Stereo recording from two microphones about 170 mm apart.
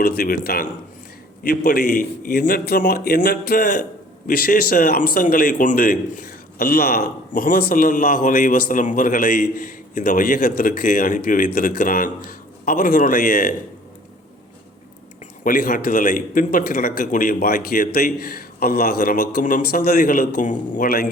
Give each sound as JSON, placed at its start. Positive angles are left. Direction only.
{"t": 0.0, "sound": "a man's voice", "side_deg": 65}
{"t": 15.2, "sound": "a man's voice", "side_deg": 55}